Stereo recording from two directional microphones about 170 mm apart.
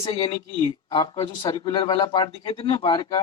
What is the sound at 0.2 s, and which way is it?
A man's voice, 20° left (ahead or behind).